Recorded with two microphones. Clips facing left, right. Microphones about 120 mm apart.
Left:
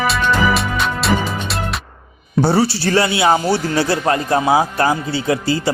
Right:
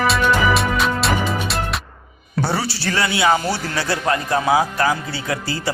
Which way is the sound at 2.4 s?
30° left (ahead or behind).